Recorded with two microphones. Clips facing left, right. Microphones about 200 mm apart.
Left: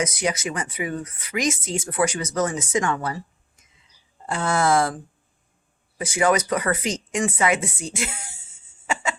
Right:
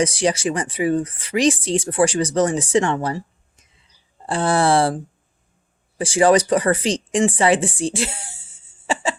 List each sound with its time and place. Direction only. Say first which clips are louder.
0.0 s speech: right 6 dB; 30° right (ahead or behind)
6.0 s speech: right 6 dB; 30° right (ahead or behind)
8.9 s a sound: right 4 dB; 30° right (ahead or behind)